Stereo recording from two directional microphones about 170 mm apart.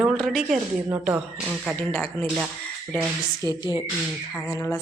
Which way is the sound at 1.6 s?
5° left (ahead or behind).